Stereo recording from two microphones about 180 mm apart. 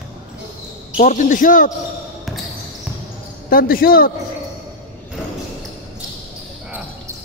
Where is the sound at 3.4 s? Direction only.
55° left (ahead or behind).